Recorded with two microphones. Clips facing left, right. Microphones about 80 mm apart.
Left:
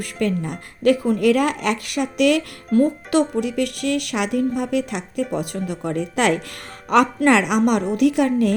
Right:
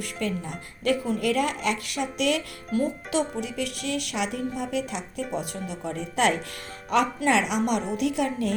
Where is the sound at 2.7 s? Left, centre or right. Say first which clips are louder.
Left 9 dB; left.